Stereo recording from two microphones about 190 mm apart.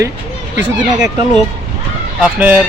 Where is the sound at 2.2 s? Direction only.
10° right (ahead or behind).